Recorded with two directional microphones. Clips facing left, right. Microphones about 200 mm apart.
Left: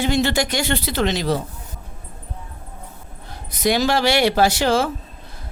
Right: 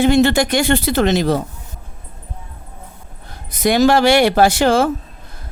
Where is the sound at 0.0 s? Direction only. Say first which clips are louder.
Right 7 dB; 55° right (ahead or behind).